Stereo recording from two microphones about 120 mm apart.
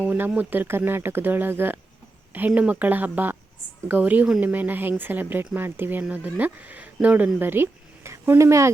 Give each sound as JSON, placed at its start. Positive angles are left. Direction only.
{"t": 0.0, "sound": "speech", "side_deg": -10}